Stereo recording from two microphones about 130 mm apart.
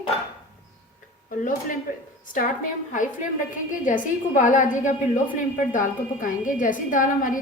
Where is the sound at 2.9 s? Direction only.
75° left (ahead or behind).